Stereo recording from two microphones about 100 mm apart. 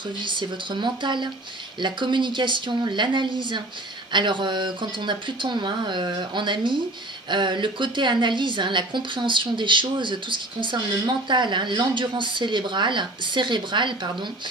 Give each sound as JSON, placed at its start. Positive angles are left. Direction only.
{"t": 0.2, "sound": "a woman's voice", "side_deg": -50}